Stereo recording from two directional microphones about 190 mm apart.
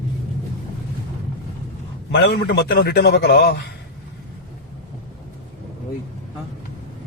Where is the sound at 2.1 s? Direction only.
65° left (ahead or behind).